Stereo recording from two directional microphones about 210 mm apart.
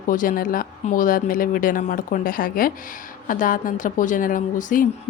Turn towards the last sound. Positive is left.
turn(degrees=40)  # may be behind; listen again after turning